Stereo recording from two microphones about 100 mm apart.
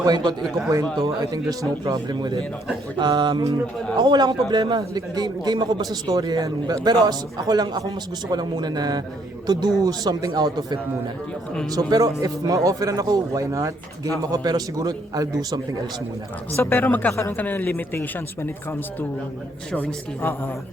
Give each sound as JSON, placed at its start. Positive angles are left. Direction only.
{"t": 0.0, "sound": "a man's voice", "side_deg": -45}
{"t": 16.6, "sound": "speech", "side_deg": 20}